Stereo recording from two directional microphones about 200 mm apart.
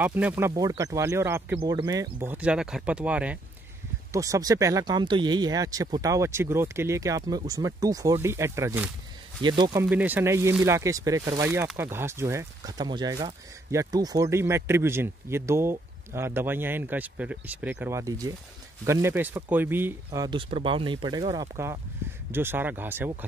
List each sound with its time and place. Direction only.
0.0 s speech: 10° right (ahead or behind)
9.8 s speech: 10° right (ahead or behind)